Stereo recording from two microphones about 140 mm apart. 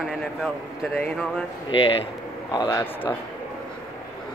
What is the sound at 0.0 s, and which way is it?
A man's voice, centre (ahead or behind).